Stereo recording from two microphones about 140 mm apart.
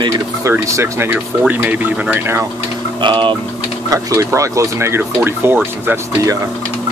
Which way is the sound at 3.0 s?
35° right (ahead or behind).